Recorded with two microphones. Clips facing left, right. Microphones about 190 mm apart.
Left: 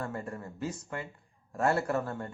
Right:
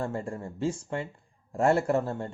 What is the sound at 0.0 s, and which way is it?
Speech, 25° right (ahead or behind).